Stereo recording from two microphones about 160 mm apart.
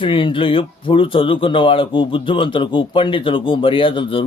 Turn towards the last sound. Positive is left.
turn(degrees=30)  # may be behind; listen again after turning